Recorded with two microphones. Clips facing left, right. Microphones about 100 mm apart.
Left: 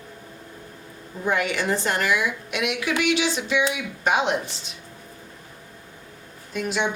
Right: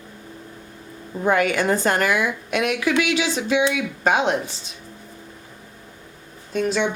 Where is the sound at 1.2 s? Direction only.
45° right (ahead or behind).